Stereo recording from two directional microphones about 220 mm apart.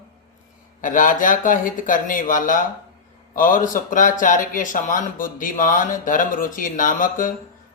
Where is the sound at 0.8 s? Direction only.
35° left (ahead or behind).